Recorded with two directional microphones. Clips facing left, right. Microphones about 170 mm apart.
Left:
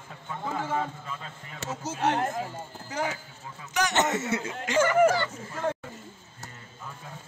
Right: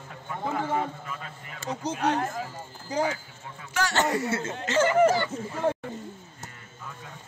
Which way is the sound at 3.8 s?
20° left (ahead or behind).